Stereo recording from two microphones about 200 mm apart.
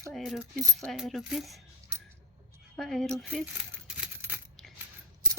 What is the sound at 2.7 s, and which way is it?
Speech, centre (ahead or behind).